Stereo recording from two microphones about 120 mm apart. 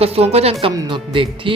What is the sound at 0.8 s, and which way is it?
Speech, 45° right (ahead or behind).